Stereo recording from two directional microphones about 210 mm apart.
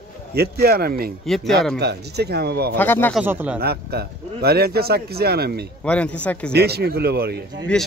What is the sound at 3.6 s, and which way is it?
A man's voice, 50° right (ahead or behind).